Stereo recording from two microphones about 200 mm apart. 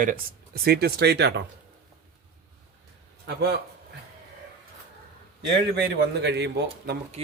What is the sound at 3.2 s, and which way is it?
Speech, 55° right (ahead or behind).